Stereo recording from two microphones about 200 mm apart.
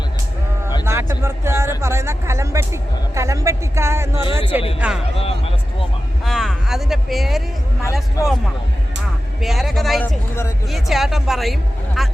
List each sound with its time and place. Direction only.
0.9 s a sound: 15° right (ahead or behind)
1.8 s speech: 15° right (ahead or behind)
5.1 s a sound: 30° left (ahead or behind)
6.2 s speech: centre (ahead or behind)
8.2 s a man's voice: 15° left (ahead or behind)
9.4 s speech: centre (ahead or behind)